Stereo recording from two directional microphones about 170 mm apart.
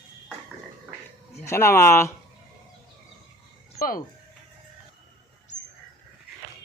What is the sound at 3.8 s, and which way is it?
Speech, 55° left (ahead or behind).